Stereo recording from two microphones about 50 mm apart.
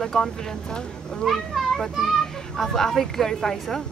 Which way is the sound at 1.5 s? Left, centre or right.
Centre.